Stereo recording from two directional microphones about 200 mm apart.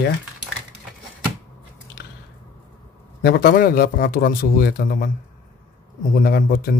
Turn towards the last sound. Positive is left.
turn(degrees=45)  # may be behind; listen again after turning